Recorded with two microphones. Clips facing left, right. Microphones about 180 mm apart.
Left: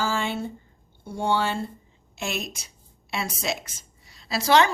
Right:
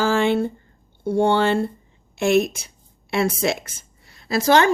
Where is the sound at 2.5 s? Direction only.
55° right (ahead or behind).